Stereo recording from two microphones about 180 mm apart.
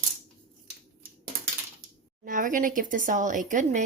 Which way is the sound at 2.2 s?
45° right (ahead or behind).